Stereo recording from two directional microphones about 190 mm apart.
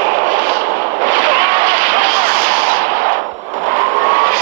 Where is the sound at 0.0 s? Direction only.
90° right.